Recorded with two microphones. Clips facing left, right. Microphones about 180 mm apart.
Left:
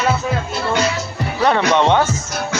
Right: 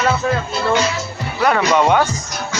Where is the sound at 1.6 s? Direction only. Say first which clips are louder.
Right 1 dB; 10° right (ahead or behind).